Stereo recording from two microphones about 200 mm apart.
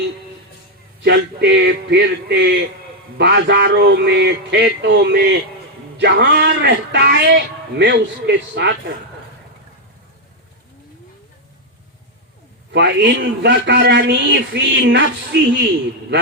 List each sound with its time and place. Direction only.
1.0 s a man's voice: 55° right (ahead or behind)
12.7 s a man's voice: 60° right (ahead or behind)